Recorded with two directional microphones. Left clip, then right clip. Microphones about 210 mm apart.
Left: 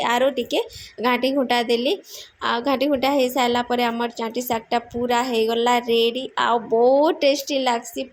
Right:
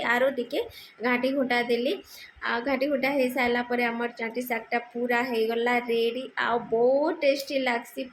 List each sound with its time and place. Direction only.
0.0 s a woman's voice: 30° left (ahead or behind)